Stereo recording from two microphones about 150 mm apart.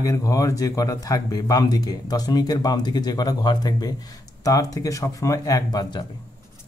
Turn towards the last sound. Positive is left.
turn(degrees=30)  # may be behind; listen again after turning